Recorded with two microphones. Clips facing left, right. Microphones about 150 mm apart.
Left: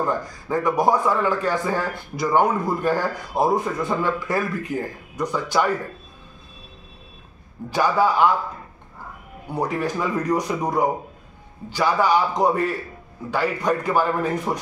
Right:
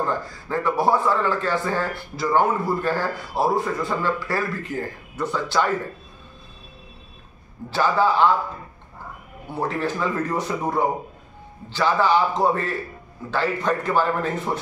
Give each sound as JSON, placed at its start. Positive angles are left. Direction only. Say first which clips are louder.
{"t": 0.0, "sound": "a man's voice", "louder": "left 1 dB", "side_deg": 15}
{"t": 7.7, "sound": "a man's voice", "louder": "even", "side_deg": 15}
{"t": 9.5, "sound": "a man's voice", "louder": "left 1 dB", "side_deg": 15}